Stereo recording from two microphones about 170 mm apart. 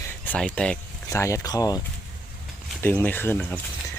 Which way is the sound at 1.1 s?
15° left (ahead or behind).